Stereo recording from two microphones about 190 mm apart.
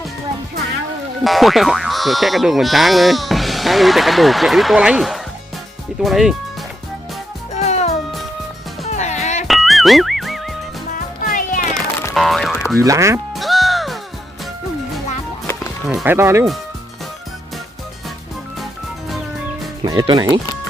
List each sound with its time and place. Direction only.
1.2 s speech: centre (ahead or behind)
7.5 s music: 35° left (ahead or behind)
9.5 s music: centre (ahead or behind)
10.9 s music: 45° left (ahead or behind)
11.7 s music: 15° left (ahead or behind)
12.1 s boing: centre (ahead or behind)
12.7 s speech: 15° right (ahead or behind)
13.3 s music: centre (ahead or behind)
15.9 s speech: centre (ahead or behind)
16.1 s speech: 15° right (ahead or behind)
18.6 s music: centre (ahead or behind)
19.8 s speech: 20° right (ahead or behind)